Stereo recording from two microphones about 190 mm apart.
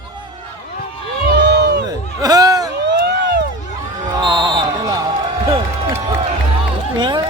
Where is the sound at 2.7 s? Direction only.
65° right (ahead or behind).